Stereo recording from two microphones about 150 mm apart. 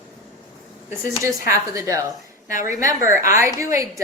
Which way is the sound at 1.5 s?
20° right (ahead or behind).